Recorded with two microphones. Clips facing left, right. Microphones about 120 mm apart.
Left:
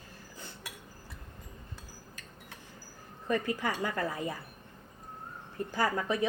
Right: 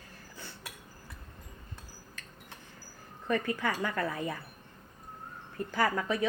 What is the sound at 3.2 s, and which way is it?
Speech, 20° left (ahead or behind).